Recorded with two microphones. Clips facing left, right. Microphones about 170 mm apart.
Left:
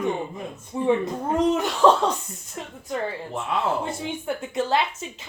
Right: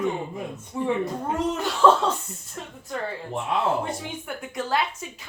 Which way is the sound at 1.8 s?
15° left (ahead or behind).